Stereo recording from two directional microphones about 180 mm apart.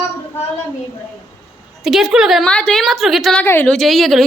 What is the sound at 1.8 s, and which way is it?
A woman's voice, centre (ahead or behind).